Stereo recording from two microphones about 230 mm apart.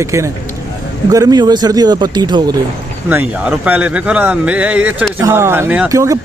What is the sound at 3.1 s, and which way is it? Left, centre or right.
A man's voice, centre.